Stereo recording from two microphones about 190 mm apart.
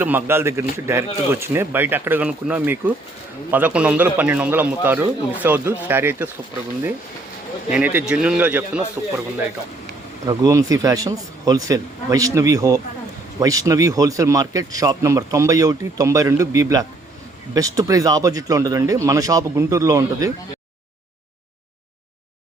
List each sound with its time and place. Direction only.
0.0 s speech: 10° right (ahead or behind)
7.7 s speech: 5° right (ahead or behind)
10.2 s speech: 20° right (ahead or behind)